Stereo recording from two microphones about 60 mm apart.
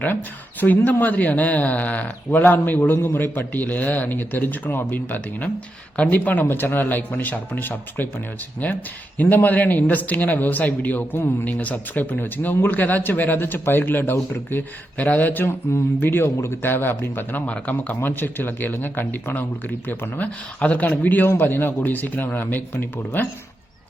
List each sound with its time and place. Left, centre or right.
0.0 s speech: left